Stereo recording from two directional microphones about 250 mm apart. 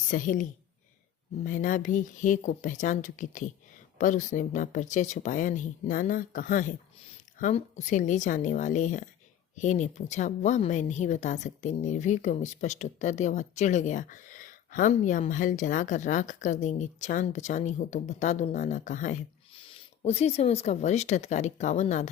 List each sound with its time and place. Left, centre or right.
0.1 s speech: left
1.5 s speech: left